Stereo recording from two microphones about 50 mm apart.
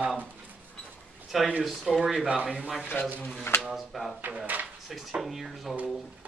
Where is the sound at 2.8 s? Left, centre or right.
Left.